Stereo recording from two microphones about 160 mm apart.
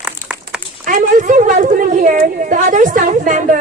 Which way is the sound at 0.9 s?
50° right (ahead or behind).